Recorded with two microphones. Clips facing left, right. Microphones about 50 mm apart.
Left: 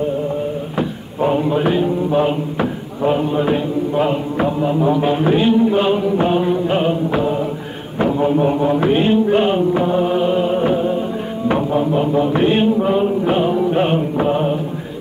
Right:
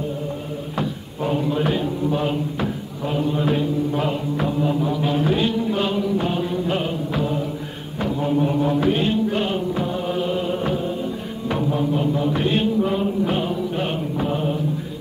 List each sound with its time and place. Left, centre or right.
0.7 s speech: left
8.0 s mantra: left